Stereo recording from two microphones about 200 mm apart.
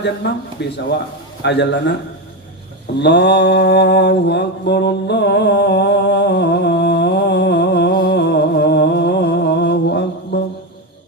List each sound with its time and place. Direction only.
0.2 s a man's voice: 60° left (ahead or behind)
3.0 s mantra: 60° left (ahead or behind)